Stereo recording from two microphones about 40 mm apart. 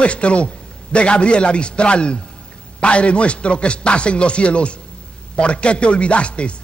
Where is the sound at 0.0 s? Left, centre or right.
Left.